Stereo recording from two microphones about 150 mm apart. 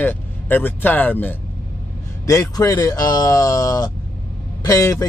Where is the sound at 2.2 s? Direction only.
20° left (ahead or behind).